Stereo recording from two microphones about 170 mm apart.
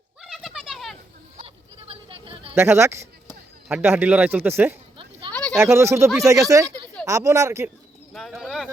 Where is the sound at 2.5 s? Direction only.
15° right (ahead or behind).